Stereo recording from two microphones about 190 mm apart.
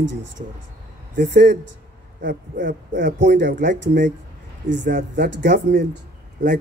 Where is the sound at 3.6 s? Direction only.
65° right (ahead or behind).